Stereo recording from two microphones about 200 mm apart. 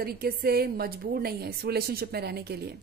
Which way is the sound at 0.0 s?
50° right (ahead or behind).